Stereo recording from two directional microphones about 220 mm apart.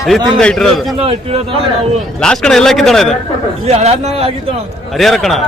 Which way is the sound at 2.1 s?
5° left (ahead or behind).